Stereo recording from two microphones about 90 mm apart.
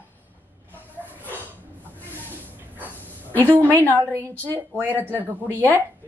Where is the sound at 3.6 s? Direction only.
20° left (ahead or behind).